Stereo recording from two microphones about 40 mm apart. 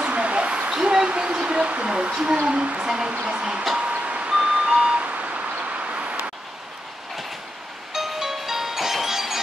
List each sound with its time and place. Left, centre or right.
0.0 s a sound: right
1.0 s speech: right
3.7 s vehicle: right
4.3 s vehicle: centre
5.0 s vehicle: right
7.9 s music: centre